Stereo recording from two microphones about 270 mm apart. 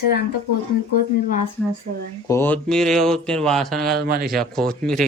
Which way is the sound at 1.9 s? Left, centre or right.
Right.